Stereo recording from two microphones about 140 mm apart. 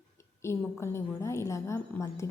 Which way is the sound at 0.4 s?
20° left (ahead or behind).